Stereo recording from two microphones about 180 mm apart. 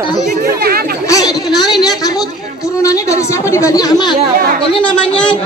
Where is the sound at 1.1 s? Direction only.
20° left (ahead or behind).